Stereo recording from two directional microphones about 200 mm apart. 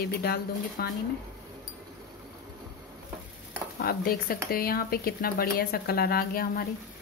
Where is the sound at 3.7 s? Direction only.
50° left (ahead or behind).